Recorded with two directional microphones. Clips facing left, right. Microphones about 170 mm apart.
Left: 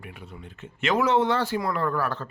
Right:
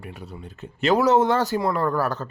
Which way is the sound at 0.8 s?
35° right (ahead or behind).